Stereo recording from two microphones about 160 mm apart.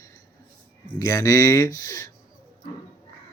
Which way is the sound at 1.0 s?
20° left (ahead or behind).